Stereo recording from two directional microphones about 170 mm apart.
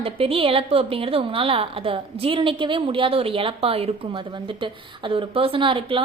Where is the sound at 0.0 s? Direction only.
35° right (ahead or behind).